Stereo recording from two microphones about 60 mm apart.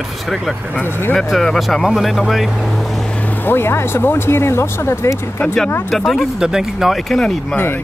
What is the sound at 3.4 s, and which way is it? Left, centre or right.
Speech, left.